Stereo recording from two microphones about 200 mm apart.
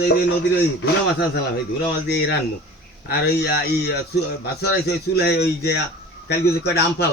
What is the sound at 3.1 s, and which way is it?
Speech, 55° left (ahead or behind).